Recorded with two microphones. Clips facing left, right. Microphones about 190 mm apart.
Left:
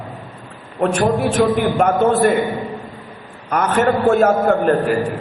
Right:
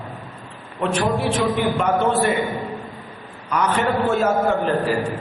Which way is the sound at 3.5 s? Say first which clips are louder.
Left 4 dB; 50° left (ahead or behind).